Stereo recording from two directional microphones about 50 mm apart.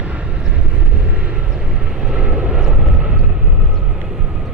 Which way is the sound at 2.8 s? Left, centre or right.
Right.